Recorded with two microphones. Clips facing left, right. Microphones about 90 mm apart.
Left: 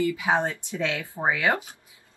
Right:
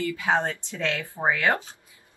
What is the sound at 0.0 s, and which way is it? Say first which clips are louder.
A woman's voice: left 1 dB; 15° left (ahead or behind).